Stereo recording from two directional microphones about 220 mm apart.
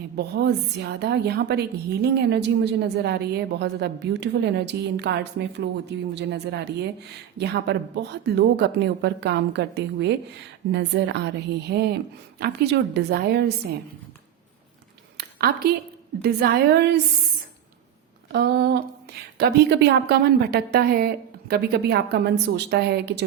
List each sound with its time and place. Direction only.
0.2 s a woman's voice: 50° right (ahead or behind)
15.2 s a sound: 45° right (ahead or behind)
16.2 s a woman's voice: 50° right (ahead or behind)
18.3 s a woman's voice: 50° right (ahead or behind)